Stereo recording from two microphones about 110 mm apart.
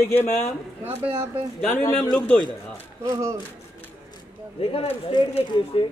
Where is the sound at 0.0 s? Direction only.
20° left (ahead or behind).